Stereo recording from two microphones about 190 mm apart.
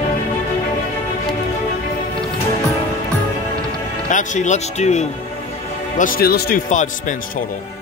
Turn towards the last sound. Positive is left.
turn(degrees=40)  # may be behind; listen again after turning